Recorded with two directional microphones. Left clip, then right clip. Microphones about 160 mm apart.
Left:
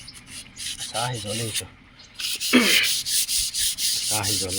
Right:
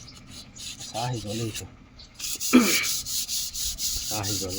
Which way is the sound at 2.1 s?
50° right (ahead or behind).